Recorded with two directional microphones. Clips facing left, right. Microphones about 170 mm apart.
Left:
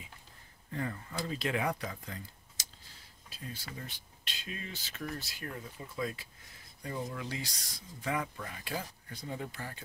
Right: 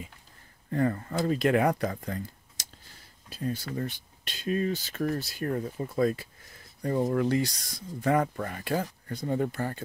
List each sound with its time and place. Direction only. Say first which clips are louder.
0.7 s speech: right 11 dB; 50° right (ahead or behind)
3.3 s speech: right 13 dB; 50° right (ahead or behind)